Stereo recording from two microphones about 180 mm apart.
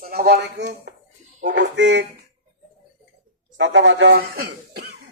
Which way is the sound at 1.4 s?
85° right.